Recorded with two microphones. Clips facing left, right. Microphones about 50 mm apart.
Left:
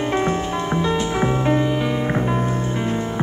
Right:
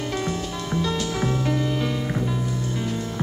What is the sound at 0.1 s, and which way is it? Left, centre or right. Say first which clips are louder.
Music: left 7 dB; left.